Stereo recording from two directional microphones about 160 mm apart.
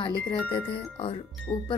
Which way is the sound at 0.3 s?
30° left (ahead or behind).